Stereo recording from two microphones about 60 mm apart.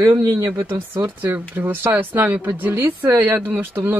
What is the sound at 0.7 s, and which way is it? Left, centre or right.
Speech, right.